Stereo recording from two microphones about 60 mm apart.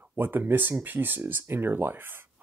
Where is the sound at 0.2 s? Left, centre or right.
Right.